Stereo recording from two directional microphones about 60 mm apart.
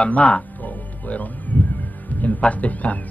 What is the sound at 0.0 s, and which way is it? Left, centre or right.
Music, left.